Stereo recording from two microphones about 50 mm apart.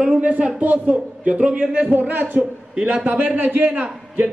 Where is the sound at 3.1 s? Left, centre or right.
Right.